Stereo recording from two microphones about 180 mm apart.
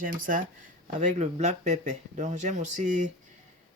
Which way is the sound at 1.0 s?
40° right (ahead or behind).